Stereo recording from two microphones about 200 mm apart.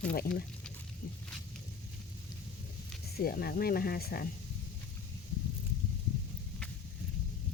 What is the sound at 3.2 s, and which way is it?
Speech, 50° left (ahead or behind).